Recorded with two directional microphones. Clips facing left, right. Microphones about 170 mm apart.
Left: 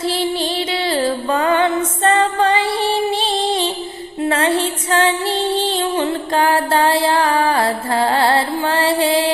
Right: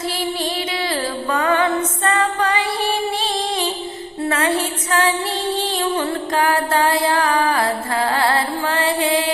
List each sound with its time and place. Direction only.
0.9 s music: 30° left (ahead or behind)
4.3 s music: 30° left (ahead or behind)